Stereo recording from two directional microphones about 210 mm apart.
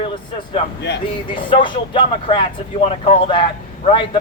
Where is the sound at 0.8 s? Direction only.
55° left (ahead or behind).